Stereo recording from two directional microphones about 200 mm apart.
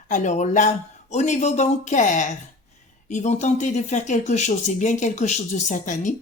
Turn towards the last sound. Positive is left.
turn(degrees=40)  # may be behind; listen again after turning